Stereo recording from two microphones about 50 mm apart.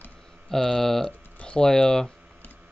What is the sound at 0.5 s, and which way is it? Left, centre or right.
Speech, centre.